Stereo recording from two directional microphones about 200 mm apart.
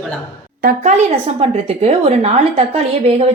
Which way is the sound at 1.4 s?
30° right (ahead or behind).